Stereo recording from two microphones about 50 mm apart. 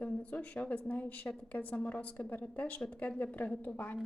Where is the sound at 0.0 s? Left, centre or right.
Left.